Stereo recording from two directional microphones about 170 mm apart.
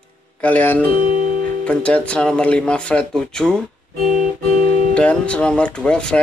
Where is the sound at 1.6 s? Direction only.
5° left (ahead or behind).